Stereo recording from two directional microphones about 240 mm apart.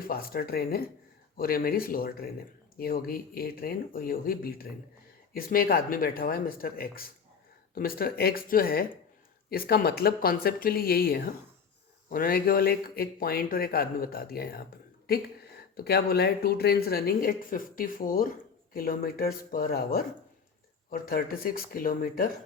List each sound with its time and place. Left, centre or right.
0.0 s speech: left
15.7 s speech: left